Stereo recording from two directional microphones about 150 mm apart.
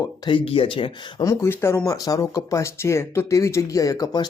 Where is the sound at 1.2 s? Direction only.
15° left (ahead or behind).